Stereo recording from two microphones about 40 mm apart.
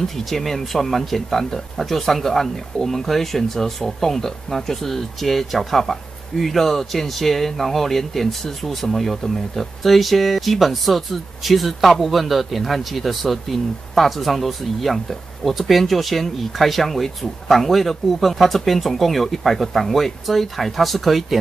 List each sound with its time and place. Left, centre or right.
0.0 s speech: centre